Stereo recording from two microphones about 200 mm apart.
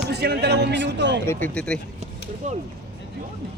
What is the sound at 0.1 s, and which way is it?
A man's voice, 55° right (ahead or behind).